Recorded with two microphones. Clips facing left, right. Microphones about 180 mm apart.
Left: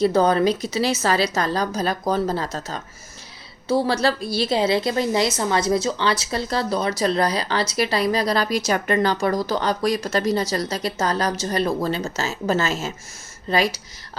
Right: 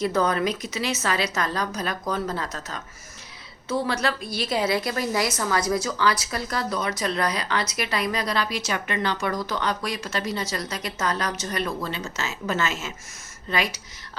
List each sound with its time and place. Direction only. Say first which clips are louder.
0.0 s a woman's voice: left 6 dB; 30° left (ahead or behind)